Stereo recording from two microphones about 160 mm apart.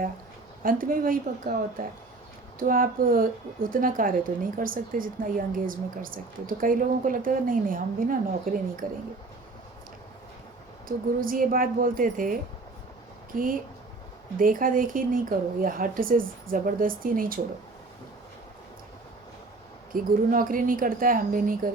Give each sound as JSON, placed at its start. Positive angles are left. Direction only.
{"t": 0.6, "sound": "speech", "side_deg": -60}
{"t": 10.8, "sound": "speech", "side_deg": -60}
{"t": 19.9, "sound": "speech", "side_deg": -60}